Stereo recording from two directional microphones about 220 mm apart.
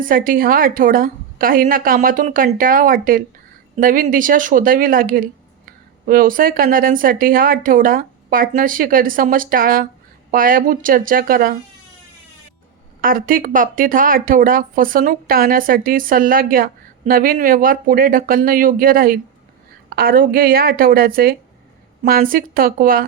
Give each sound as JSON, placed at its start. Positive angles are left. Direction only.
{"t": 0.0, "sound": "speech", "side_deg": -40}
{"t": 13.0, "sound": "speech", "side_deg": -40}